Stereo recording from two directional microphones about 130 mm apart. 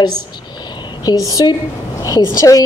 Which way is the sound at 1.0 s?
25° left (ahead or behind).